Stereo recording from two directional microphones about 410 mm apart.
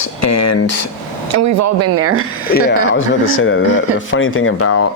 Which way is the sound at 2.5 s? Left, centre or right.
Left.